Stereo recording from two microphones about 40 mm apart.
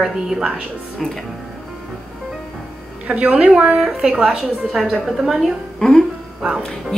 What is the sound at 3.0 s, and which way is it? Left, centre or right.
Speech, right.